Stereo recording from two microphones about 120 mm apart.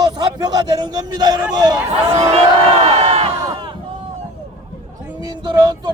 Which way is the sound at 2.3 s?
55° right (ahead or behind).